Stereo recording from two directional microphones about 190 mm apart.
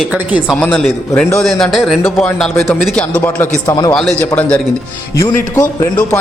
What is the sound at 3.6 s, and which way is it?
Speech, 20° left (ahead or behind).